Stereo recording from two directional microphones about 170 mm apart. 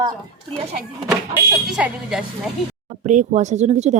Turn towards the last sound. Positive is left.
turn(degrees=-40)  # may be behind; listen again after turning